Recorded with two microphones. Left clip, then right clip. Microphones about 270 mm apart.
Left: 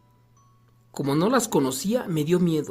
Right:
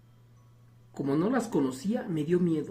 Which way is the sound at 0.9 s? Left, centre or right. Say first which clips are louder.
Left 6 dB; left.